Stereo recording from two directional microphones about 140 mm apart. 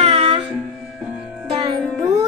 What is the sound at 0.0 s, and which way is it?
Music, 45° right (ahead or behind).